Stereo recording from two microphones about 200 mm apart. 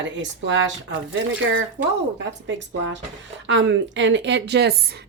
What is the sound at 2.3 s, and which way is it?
Speech, 65° right (ahead or behind).